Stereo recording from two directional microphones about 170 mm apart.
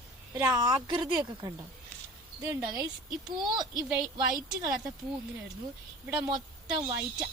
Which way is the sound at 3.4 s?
25° right (ahead or behind).